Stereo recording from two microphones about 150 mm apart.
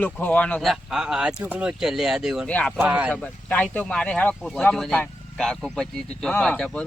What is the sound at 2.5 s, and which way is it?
Speech, 10° left (ahead or behind).